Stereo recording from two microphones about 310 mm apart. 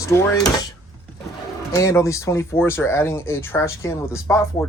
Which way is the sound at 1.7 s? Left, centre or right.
Centre.